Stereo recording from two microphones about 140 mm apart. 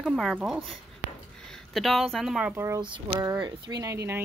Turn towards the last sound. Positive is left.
turn(degrees=-20)  # may be behind; listen again after turning